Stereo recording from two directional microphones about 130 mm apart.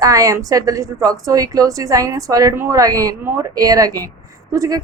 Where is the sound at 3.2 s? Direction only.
20° right (ahead or behind).